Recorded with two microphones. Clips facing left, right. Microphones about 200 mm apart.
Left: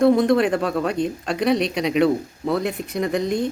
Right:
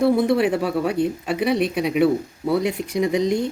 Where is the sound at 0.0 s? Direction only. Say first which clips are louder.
Left 2 dB; 5° right (ahead or behind).